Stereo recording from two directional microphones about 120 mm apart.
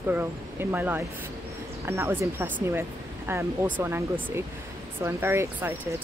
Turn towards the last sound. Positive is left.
turn(degrees=-20)  # may be behind; listen again after turning